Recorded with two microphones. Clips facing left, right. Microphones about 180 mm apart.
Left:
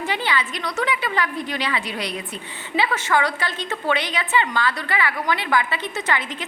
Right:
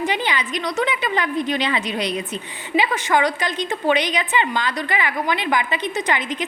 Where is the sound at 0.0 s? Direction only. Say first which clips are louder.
Right 2 dB; 20° right (ahead or behind).